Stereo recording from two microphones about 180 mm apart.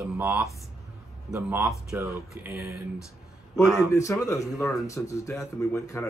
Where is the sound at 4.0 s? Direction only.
15° left (ahead or behind).